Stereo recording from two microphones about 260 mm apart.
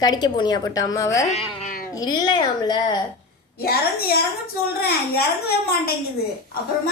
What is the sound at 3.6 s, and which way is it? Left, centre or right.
A child's voice, left.